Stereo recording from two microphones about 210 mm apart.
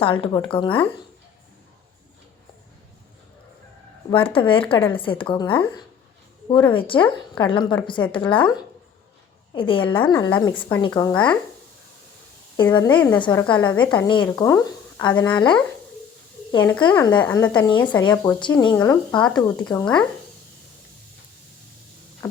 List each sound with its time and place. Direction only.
0.0 s speech: 25° left (ahead or behind)
4.1 s speech: 25° left (ahead or behind)
12.7 s speech: 20° left (ahead or behind)
13.0 s a woman's voice: 5° left (ahead or behind)
13.2 s speech: 20° left (ahead or behind)
16.5 s a woman's voice: 10° left (ahead or behind)
18.1 s a woman's voice: 10° left (ahead or behind)
22.2 s a sound: 15° left (ahead or behind)